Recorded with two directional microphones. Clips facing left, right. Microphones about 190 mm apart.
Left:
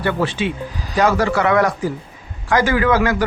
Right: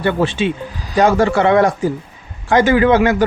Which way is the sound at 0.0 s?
25° right (ahead or behind).